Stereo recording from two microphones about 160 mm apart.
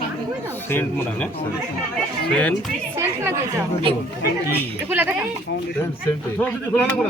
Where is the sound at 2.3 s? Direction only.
5° left (ahead or behind).